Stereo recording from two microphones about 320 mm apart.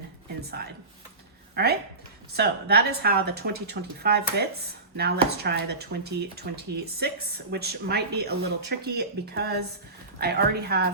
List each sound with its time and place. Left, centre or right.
1.6 s speech: right